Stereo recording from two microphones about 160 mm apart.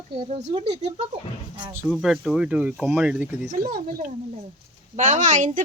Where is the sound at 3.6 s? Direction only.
60° right (ahead or behind).